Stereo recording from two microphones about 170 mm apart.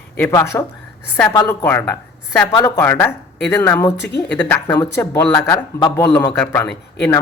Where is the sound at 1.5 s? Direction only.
10° left (ahead or behind).